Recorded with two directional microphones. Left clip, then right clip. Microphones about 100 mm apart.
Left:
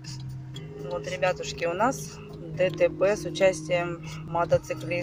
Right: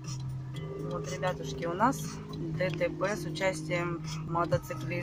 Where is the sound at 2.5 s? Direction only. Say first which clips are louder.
Left 8 dB; 30° left (ahead or behind).